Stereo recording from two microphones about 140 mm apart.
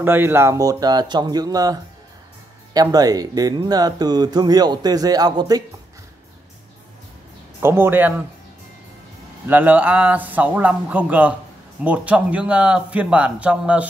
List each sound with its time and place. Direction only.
0.0 s speech: 15° right (ahead or behind)
7.6 s a man's voice: 15° right (ahead or behind)
9.5 s a man's voice: 10° right (ahead or behind)